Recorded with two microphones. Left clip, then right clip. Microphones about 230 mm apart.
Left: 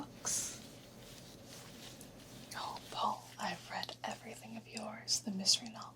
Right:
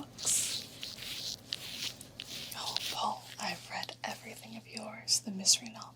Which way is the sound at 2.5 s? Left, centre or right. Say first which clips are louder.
Right 4 dB; centre.